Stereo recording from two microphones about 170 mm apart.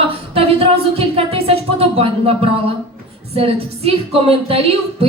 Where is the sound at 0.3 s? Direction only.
35° right (ahead or behind).